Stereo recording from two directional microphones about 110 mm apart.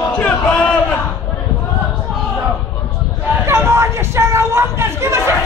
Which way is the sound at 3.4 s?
25° right (ahead or behind).